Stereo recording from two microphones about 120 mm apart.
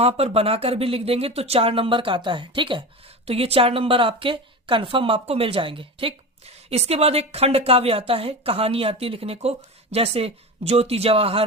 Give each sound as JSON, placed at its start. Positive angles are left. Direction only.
{"t": 0.0, "sound": "speech", "side_deg": -55}
{"t": 3.2, "sound": "speech", "side_deg": -55}